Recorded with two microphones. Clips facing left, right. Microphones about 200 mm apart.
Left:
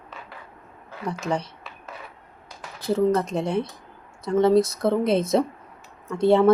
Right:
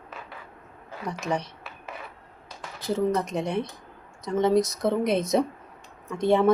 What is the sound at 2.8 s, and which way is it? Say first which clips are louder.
Speech: left 4 dB; 20° right (ahead or behind).